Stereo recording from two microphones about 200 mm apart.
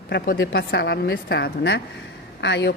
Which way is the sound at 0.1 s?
55° left (ahead or behind).